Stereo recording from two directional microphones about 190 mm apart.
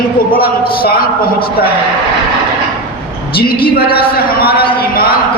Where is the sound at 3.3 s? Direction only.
55° left (ahead or behind).